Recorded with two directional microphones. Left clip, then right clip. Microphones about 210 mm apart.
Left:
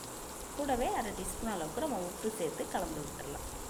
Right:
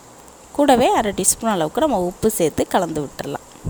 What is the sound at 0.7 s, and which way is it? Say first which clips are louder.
A woman's voice: right 18 dB; 55° right (ahead or behind).